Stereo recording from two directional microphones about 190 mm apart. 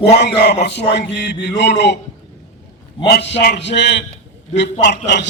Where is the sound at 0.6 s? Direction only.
65° left (ahead or behind).